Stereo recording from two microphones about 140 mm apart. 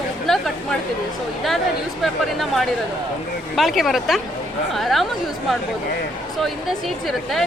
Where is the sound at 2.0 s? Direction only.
Centre (ahead or behind).